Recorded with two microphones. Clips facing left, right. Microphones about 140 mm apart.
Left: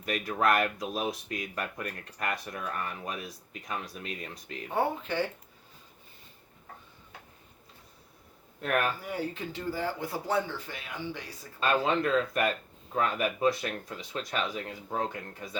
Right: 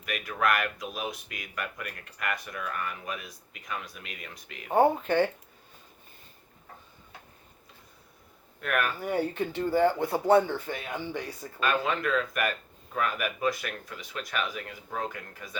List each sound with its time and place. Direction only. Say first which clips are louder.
0.0 s speech: left 1 dB; 30° left (ahead or behind)
4.7 s speech: right 7 dB; 50° right (ahead or behind)
8.6 s speech: left 1 dB; 30° left (ahead or behind)
9.0 s speech: right 6 dB; 60° right (ahead or behind)
11.6 s speech: left 1 dB; 30° left (ahead or behind)